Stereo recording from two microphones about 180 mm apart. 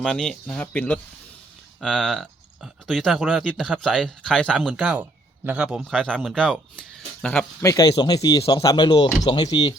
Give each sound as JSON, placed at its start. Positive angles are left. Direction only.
{"t": 0.0, "sound": "speech", "side_deg": 5}
{"t": 7.6, "sound": "speech", "side_deg": 20}